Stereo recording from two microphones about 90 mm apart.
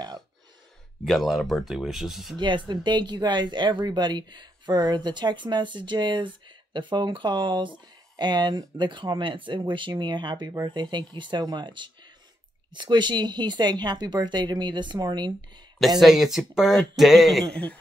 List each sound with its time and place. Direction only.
1.0 s speech: centre (ahead or behind)
2.3 s speech: 60° right (ahead or behind)
16.0 s speech: 5° right (ahead or behind)